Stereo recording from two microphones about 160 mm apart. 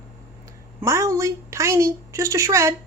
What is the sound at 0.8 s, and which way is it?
A woman's voice, 20° right (ahead or behind).